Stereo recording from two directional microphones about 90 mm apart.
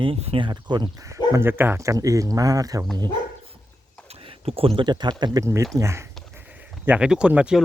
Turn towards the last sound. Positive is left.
turn(degrees=-10)  # may be behind; listen again after turning